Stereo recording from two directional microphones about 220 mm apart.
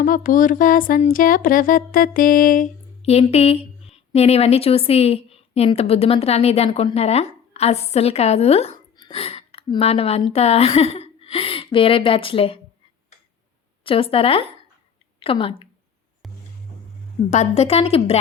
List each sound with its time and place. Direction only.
0.0 s music: 40° left (ahead or behind)
3.0 s a woman's voice: 30° left (ahead or behind)
13.8 s a woman's voice: 25° left (ahead or behind)
16.2 s music: centre (ahead or behind)
17.3 s a woman's voice: 30° left (ahead or behind)